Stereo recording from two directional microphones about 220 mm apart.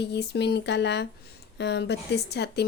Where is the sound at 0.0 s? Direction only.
50° left (ahead or behind).